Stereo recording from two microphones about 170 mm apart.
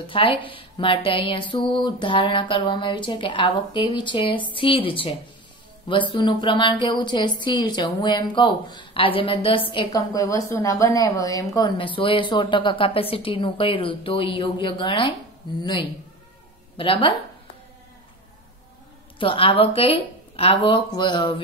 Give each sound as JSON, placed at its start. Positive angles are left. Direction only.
{"t": 0.0, "sound": "speech", "side_deg": 30}
{"t": 19.1, "sound": "speech", "side_deg": 30}